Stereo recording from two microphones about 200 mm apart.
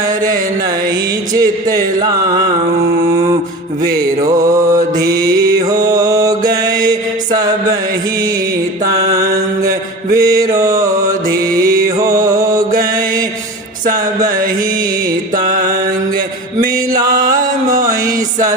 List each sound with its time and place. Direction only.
1.3 s speech: 20° right (ahead or behind)
4.5 s music: 15° right (ahead or behind)
8.8 s mantra: 15° right (ahead or behind)
11.6 s music: 15° right (ahead or behind)
17.3 s music: 15° right (ahead or behind)